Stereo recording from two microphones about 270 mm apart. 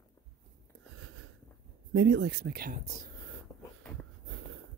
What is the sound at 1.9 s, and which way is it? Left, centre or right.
Speech, right.